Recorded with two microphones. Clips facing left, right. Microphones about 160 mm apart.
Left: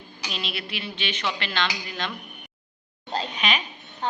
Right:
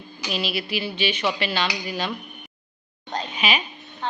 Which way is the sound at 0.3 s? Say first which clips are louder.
Right 7 dB; 5° right (ahead or behind).